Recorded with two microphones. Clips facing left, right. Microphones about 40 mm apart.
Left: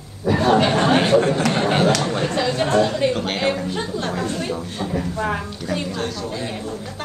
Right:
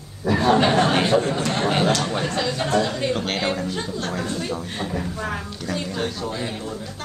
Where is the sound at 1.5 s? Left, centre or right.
Centre.